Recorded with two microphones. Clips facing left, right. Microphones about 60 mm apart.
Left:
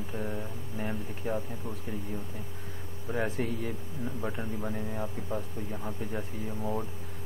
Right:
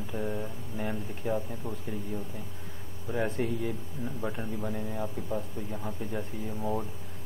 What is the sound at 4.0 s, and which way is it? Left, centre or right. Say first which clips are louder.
Speech: even; centre.